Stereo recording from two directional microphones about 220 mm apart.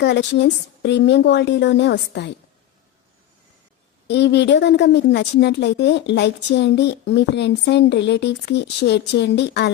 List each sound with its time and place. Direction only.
0.0 s a woman's voice: 50° left (ahead or behind)
4.0 s a woman's voice: 50° left (ahead or behind)